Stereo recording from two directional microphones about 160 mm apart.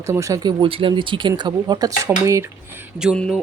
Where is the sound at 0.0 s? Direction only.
20° right (ahead or behind).